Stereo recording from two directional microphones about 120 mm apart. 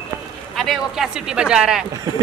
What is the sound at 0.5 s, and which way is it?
Speech, centre (ahead or behind).